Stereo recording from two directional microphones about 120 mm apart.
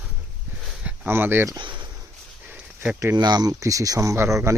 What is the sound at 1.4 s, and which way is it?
Speech, 40° right (ahead or behind).